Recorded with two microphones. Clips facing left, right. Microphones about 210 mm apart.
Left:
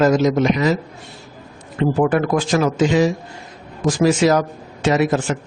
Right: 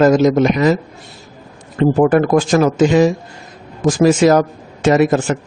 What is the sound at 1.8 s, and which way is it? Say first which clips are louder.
Speech: right 5 dB; 45° right (ahead or behind).